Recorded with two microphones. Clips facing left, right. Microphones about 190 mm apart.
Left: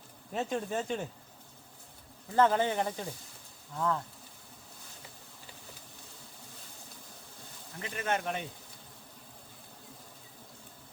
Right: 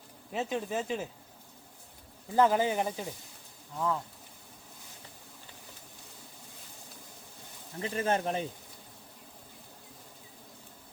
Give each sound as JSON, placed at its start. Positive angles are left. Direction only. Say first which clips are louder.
{"t": 0.3, "sound": "speech", "louder": "even", "side_deg": 0}
{"t": 2.3, "sound": "speech", "louder": "right 1 dB", "side_deg": -10}
{"t": 7.8, "sound": "speech", "louder": "right 4 dB", "side_deg": -30}